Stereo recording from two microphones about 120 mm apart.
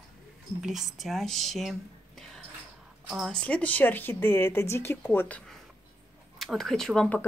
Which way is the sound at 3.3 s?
10° left (ahead or behind).